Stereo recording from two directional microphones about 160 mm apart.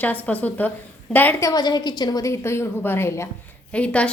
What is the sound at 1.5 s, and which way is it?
A woman's voice, 25° left (ahead or behind).